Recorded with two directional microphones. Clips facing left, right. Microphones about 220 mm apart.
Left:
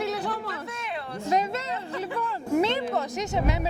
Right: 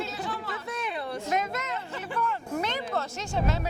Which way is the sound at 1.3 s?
30° left (ahead or behind).